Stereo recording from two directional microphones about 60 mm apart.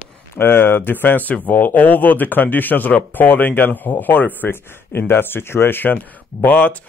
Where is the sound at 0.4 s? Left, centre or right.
Left.